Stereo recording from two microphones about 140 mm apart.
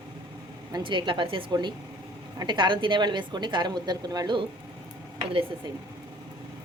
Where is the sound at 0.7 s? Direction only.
35° right (ahead or behind).